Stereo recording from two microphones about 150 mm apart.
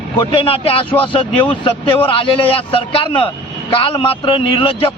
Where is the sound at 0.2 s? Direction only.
35° left (ahead or behind).